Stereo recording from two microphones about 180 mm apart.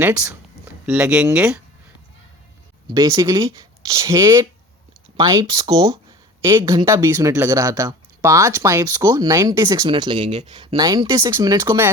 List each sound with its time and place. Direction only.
0.0 s speech: 5° right (ahead or behind)
2.8 s speech: 20° right (ahead or behind)
6.4 s speech: 15° right (ahead or behind)